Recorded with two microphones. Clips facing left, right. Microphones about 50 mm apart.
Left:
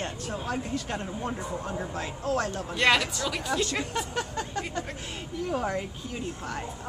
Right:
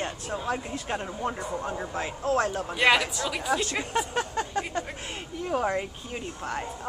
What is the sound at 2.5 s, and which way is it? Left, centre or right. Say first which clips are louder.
Speech: left 1 dB; centre.